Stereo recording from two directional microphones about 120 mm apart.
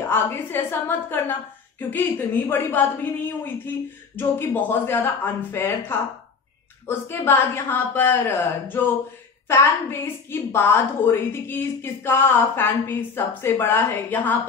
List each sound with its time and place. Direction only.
0.1 s a woman's voice: 20° left (ahead or behind)